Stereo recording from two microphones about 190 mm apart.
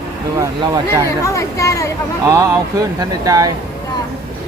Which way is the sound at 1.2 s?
15° left (ahead or behind).